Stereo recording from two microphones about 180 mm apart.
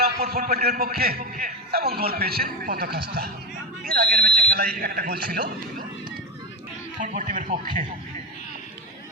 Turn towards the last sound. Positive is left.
turn(degrees=-45)  # may be behind; listen again after turning